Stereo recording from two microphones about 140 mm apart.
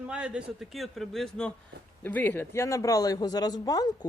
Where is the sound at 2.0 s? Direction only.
10° left (ahead or behind).